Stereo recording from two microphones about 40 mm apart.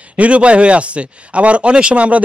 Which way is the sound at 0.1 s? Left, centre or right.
Right.